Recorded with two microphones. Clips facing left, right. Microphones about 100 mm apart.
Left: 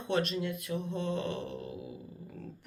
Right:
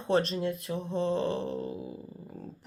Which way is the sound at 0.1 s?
35° right (ahead or behind).